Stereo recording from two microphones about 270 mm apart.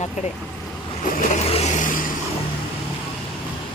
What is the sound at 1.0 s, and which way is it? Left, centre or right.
Vehicle, left.